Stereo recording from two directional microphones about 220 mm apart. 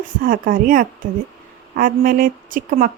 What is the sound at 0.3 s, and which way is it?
Speech, 40° right (ahead or behind).